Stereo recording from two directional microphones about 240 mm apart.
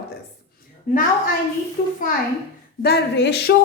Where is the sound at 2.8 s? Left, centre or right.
Left.